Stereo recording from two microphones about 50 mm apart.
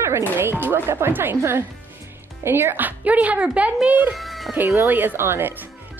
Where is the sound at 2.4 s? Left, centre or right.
Right.